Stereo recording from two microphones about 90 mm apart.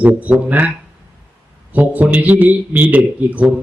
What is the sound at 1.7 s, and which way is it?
Speech, 15° right (ahead or behind).